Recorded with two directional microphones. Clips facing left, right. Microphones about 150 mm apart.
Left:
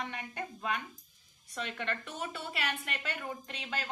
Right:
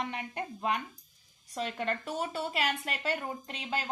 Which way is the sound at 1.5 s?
35° right (ahead or behind).